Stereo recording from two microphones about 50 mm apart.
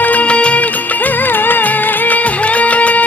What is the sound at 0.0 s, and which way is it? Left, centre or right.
Music, left.